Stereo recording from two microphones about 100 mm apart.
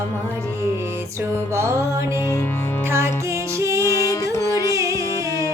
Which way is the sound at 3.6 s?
30° right (ahead or behind).